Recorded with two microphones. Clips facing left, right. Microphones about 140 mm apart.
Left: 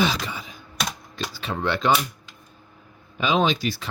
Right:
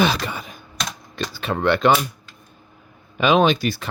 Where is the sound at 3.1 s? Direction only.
65° right (ahead or behind).